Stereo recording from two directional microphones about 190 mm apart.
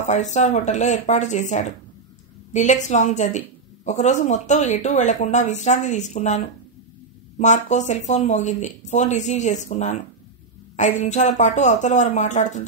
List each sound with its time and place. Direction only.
0.0 s a woman's voice: 40° left (ahead or behind)